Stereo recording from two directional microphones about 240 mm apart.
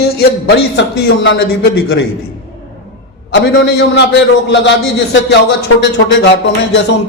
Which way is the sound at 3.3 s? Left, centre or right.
Left.